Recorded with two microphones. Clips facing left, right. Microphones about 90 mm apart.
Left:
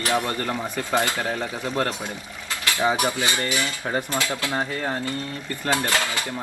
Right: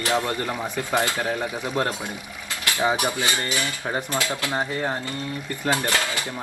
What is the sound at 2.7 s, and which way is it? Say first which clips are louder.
Stir: even; 20° right (ahead or behind).